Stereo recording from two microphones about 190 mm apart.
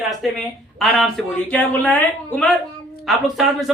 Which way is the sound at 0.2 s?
Centre (ahead or behind).